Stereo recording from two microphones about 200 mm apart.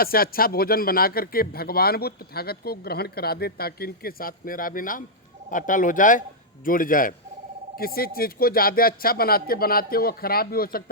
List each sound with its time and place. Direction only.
0.0 s a man's voice: 50° left (ahead or behind)